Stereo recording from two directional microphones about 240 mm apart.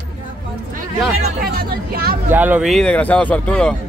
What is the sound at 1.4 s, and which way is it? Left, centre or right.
Speech, right.